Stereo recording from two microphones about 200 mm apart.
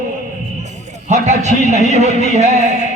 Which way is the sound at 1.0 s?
35° right (ahead or behind).